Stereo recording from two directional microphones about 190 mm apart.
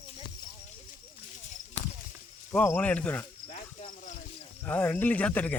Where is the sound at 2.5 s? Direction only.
10° left (ahead or behind).